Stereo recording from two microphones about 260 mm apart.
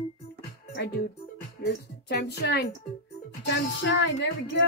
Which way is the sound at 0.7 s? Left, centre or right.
Left.